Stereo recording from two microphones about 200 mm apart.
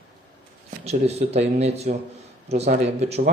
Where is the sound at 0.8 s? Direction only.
30° right (ahead or behind).